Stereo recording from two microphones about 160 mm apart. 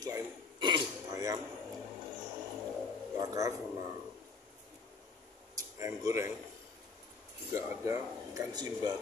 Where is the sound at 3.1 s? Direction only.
20° right (ahead or behind).